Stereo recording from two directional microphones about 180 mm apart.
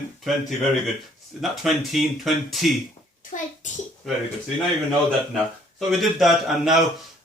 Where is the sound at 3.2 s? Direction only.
45° left (ahead or behind).